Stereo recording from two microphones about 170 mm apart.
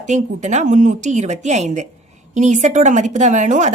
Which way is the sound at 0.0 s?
45° right (ahead or behind).